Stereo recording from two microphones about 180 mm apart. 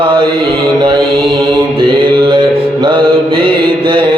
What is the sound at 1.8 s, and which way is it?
Music, 25° right (ahead or behind).